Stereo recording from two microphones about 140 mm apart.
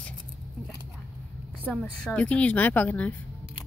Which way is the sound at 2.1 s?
10° left (ahead or behind).